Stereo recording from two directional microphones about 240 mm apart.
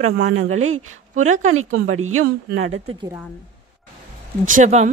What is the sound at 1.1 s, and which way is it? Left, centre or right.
Speech, right.